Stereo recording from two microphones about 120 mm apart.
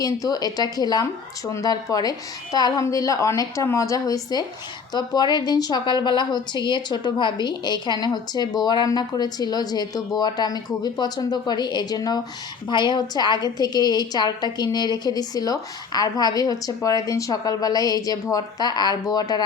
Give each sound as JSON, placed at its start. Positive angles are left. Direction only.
{"t": 0.0, "sound": "a woman's voice", "side_deg": 30}